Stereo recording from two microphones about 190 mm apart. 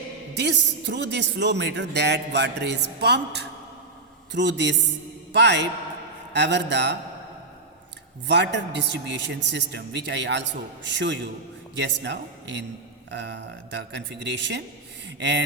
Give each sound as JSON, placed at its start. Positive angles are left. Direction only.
{"t": 0.3, "sound": "a man's voice", "side_deg": -65}
{"t": 8.3, "sound": "a man's voice", "side_deg": -65}